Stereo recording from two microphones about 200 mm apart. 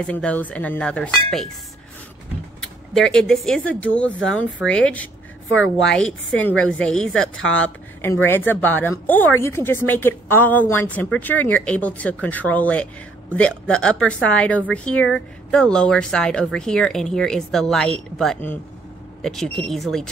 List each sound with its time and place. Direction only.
0.0 s speech: 5° left (ahead or behind)
2.6 s speech: centre (ahead or behind)
15.0 s speech: 75° left (ahead or behind)
15.5 s speech: 5° left (ahead or behind)